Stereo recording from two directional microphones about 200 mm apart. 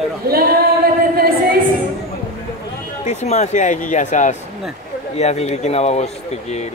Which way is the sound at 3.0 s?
35° left (ahead or behind).